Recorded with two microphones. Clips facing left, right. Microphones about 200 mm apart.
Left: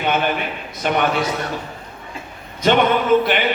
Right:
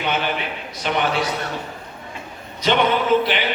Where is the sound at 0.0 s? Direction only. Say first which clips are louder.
Left 3 dB; 50° left (ahead or behind).